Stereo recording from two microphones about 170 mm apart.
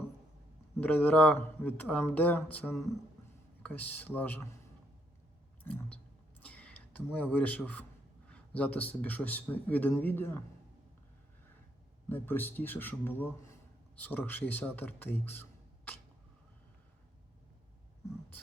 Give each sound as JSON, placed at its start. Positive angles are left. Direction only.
{"t": 0.8, "sound": "speech", "side_deg": 10}
{"t": 5.6, "sound": "speech", "side_deg": 10}
{"t": 6.4, "sound": "a sound", "side_deg": 10}
{"t": 8.3, "sound": "speech", "side_deg": 10}
{"t": 12.0, "sound": "speech", "side_deg": 10}